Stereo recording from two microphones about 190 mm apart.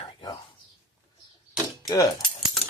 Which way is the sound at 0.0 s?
25° left (ahead or behind).